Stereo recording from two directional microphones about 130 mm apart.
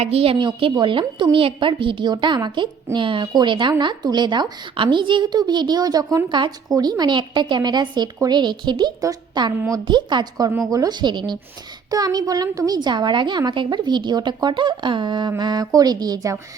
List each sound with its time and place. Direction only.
0.0 s a woman's voice: 50° right (ahead or behind); by 6.2 s 25° right (ahead or behind)
6.2 s a woman's voice: 40° right (ahead or behind)